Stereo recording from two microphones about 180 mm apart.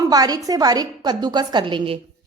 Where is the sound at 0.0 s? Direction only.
20° right (ahead or behind).